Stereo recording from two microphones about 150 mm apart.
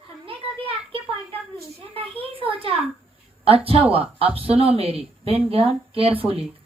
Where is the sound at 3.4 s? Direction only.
40° right (ahead or behind).